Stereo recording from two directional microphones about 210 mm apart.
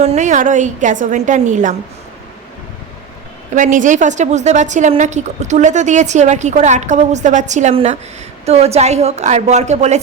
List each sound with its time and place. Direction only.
0.0 s a woman's voice: 35° right (ahead or behind)
3.5 s a woman's voice: 35° right (ahead or behind)